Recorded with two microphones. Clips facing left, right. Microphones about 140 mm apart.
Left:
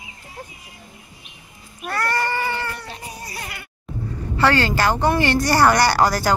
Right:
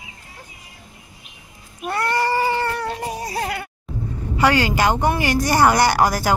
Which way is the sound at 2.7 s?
80° right.